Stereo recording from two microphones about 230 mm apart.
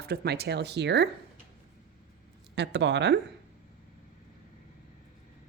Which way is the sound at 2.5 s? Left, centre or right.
Right.